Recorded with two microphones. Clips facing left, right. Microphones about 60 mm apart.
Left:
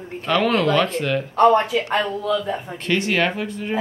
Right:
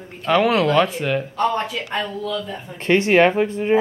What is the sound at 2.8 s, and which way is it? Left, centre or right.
Speech, right.